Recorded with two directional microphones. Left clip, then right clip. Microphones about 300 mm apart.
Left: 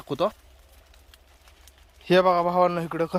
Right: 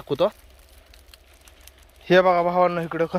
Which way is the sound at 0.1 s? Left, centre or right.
Centre.